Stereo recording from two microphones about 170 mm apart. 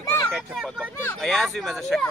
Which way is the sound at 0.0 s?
20° left (ahead or behind).